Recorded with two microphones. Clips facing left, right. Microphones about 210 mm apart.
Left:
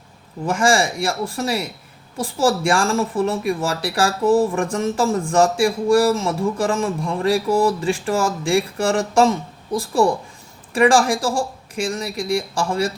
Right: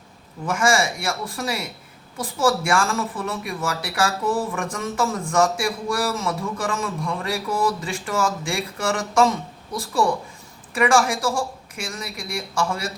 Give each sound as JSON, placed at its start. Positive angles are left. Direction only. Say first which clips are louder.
{"t": 0.4, "sound": "speech", "louder": "left 3 dB", "side_deg": 30}